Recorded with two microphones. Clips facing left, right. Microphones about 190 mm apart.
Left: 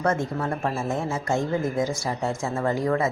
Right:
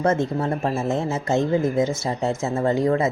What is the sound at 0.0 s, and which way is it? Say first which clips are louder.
Speech: right 4 dB; 25° right (ahead or behind).